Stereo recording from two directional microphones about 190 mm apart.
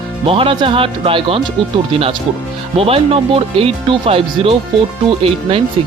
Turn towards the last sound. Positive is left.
turn(degrees=-30)  # may be behind; listen again after turning